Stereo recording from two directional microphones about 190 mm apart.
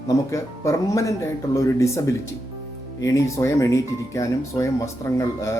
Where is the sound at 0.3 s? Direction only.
15° left (ahead or behind).